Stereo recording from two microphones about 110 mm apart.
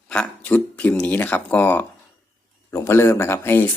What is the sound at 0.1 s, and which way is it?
Speech, 10° left (ahead or behind).